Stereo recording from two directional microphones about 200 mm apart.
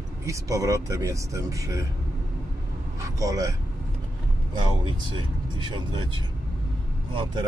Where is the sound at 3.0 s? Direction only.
15° right (ahead or behind).